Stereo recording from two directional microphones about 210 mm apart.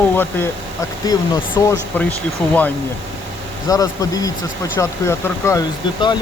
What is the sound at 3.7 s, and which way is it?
Speech, 15° left (ahead or behind).